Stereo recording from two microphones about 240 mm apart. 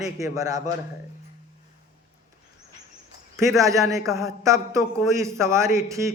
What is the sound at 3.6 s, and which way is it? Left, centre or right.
A man's voice, centre.